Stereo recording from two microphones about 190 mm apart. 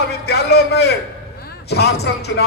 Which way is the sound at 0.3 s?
60° left (ahead or behind).